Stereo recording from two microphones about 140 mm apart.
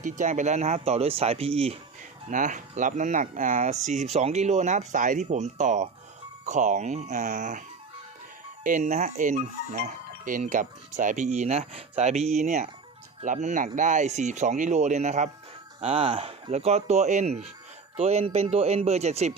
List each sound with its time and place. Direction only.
0.0 s speech: 65° right (ahead or behind); by 1.7 s 45° right (ahead or behind)
2.3 s speech: 65° right (ahead or behind)
8.6 s speech: 65° right (ahead or behind)
15.8 s speech: 40° right (ahead or behind)